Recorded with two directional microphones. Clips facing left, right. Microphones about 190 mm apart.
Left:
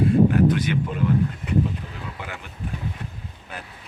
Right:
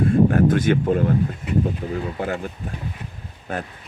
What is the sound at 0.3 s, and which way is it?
Speech, 50° right (ahead or behind).